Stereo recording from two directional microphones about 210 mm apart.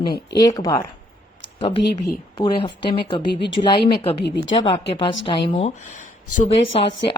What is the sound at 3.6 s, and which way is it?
Speech, 35° left (ahead or behind).